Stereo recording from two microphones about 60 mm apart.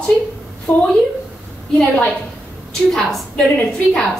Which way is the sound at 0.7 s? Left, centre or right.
Left.